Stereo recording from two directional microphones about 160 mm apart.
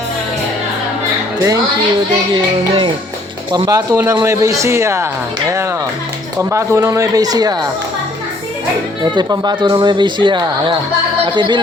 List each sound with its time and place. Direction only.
1.4 s a woman's voice: 20° right (ahead or behind)
3.5 s a man's voice: 20° right (ahead or behind)
6.5 s speech: 15° right (ahead or behind)
9.1 s speech: 25° right (ahead or behind)